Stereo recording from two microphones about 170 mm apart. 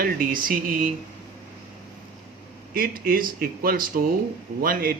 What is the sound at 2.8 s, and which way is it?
Speech, 60° right (ahead or behind).